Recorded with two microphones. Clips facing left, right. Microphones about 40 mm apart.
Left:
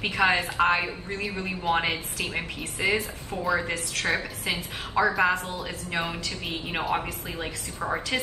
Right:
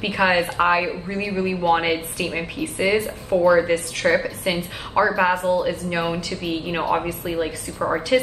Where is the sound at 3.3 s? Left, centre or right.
Centre.